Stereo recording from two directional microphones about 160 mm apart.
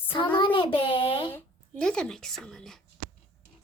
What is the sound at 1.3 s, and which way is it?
A woman's voice, 5° left (ahead or behind).